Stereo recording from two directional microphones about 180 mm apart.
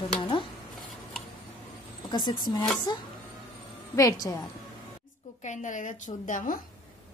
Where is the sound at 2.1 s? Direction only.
25° left (ahead or behind).